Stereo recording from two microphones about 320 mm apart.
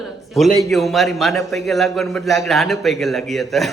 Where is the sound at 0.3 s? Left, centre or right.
Centre.